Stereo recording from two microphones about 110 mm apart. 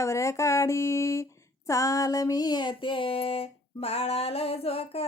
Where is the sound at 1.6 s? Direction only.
30° left (ahead or behind).